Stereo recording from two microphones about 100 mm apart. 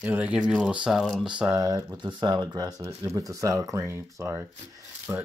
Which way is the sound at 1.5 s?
30° right (ahead or behind).